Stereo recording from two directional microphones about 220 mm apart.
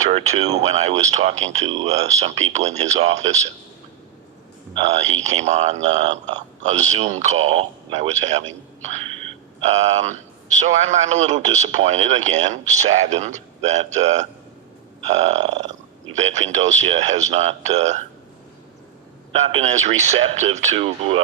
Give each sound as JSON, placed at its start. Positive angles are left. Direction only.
{"t": 0.0, "sound": "speech", "side_deg": -30}
{"t": 4.7, "sound": "speech", "side_deg": -30}
{"t": 19.3, "sound": "speech", "side_deg": -30}